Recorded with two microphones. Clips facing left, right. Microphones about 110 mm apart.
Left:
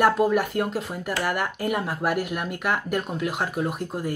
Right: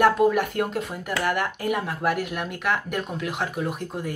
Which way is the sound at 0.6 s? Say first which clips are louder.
Even; 5° left (ahead or behind).